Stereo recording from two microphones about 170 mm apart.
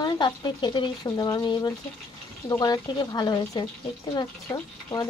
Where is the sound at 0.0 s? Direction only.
25° left (ahead or behind).